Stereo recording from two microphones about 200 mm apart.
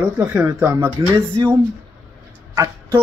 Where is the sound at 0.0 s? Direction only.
5° right (ahead or behind).